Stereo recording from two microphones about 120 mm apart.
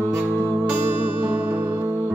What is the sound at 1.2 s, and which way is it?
Music, 15° right (ahead or behind).